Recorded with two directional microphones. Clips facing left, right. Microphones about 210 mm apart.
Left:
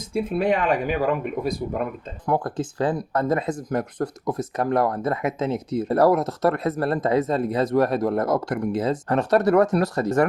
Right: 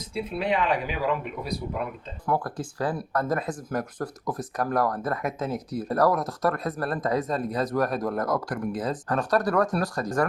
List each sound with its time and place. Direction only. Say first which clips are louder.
0.1 s speech: left 5 dB; 50° left (ahead or behind)
2.2 s speech: left 4 dB; 20° left (ahead or behind)